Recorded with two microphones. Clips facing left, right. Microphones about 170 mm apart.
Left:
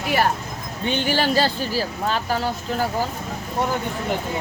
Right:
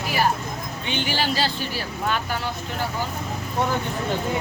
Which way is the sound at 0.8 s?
45° left (ahead or behind).